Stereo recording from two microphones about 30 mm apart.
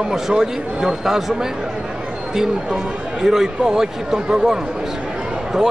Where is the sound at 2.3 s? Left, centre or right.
Centre.